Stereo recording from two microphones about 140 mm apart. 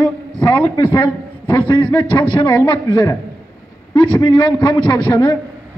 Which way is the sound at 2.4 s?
15° left (ahead or behind).